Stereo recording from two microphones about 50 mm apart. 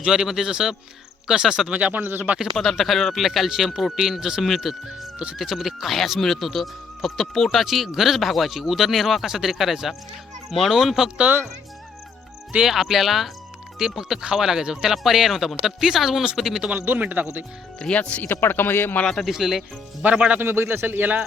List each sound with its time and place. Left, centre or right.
0.0 s speech: centre
1.9 s speech: right
2.6 s speech: centre
12.5 s speech: centre
16.8 s speech: right
17.7 s speech: centre
18.2 s a man's voice: left
19.3 s speech: centre
20.0 s speech: right
20.4 s speech: right